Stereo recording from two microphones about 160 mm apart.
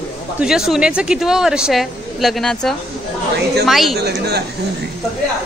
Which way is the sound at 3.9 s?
90° right.